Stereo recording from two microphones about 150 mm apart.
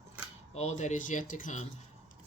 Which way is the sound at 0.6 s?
50° left (ahead or behind).